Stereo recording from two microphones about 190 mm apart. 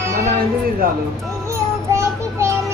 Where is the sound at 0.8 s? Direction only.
50° right (ahead or behind).